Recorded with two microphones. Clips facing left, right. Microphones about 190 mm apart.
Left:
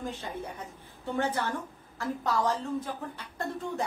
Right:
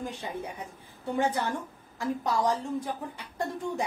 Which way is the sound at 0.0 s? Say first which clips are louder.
Right 1 dB; 15° right (ahead or behind).